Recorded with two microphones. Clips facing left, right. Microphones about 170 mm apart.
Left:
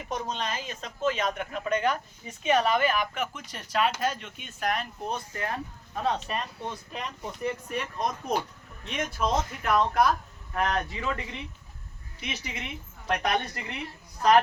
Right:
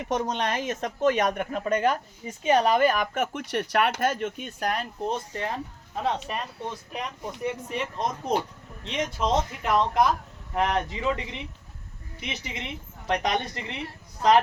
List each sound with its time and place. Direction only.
0.0 s speech: 65° right (ahead or behind)
1.3 s speech: 40° right (ahead or behind)
3.3 s speech: 65° right (ahead or behind); by 5.1 s 35° right (ahead or behind)
5.1 s speech: 25° right (ahead or behind)
6.0 s speech: 15° right (ahead or behind)